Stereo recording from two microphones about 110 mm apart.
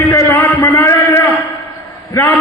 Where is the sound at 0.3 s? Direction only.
25° left (ahead or behind).